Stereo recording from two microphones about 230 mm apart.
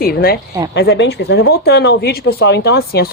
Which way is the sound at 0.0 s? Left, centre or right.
Left.